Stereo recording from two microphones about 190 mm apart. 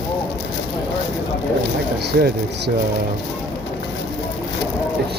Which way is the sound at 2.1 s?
55° right (ahead or behind).